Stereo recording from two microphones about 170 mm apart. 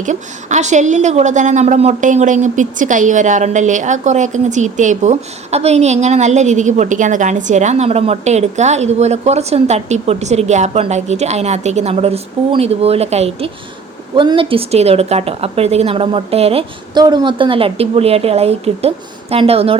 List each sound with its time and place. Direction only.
0.0 s a woman's voice: 45° right (ahead or behind)